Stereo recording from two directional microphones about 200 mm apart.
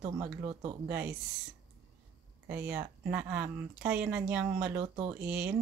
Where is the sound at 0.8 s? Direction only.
10° right (ahead or behind).